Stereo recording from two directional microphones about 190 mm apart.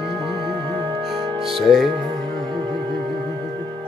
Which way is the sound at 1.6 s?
Centre (ahead or behind).